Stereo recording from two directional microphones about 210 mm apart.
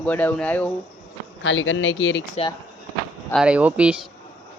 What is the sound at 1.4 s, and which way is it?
Speech, 65° left (ahead or behind).